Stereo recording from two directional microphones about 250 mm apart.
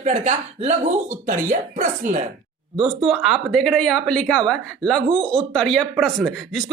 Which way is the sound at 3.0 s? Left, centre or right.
Centre.